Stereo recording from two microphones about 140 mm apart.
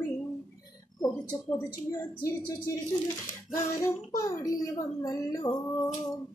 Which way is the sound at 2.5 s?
30° left (ahead or behind).